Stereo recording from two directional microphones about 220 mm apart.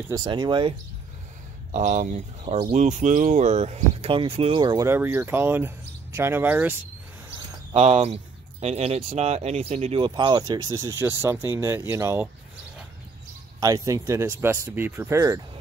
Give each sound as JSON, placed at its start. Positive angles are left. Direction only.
{"t": 0.1, "sound": "speech", "side_deg": -20}
{"t": 1.7, "sound": "speech", "side_deg": -35}
{"t": 7.7, "sound": "speech", "side_deg": -30}
{"t": 13.6, "sound": "speech", "side_deg": -15}